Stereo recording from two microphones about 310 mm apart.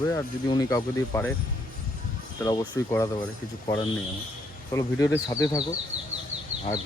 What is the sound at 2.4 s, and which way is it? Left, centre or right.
Speech, centre.